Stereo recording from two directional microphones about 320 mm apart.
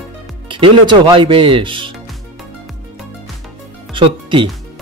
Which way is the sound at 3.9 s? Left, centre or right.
Centre.